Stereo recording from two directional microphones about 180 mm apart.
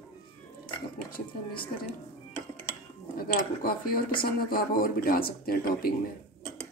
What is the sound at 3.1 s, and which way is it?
Speech, 55° left (ahead or behind).